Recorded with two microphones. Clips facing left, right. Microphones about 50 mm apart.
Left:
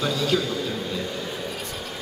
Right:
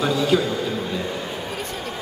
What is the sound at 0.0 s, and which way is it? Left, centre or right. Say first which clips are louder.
Speech: right 4 dB; centre.